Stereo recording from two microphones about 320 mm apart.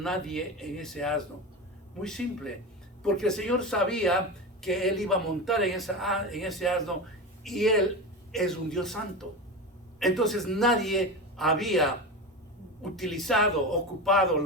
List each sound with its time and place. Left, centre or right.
0.0 s a man's voice: centre